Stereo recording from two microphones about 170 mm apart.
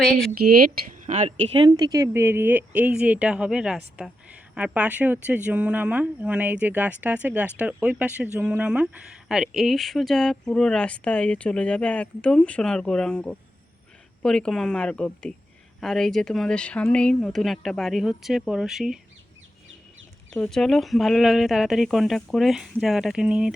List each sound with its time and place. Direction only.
0.3 s speech: 60° right (ahead or behind)
1.0 s speech: 45° right (ahead or behind)
1.5 s speech: 25° right (ahead or behind); by 18.9 s 5° right (ahead or behind)
20.3 s speech: centre (ahead or behind)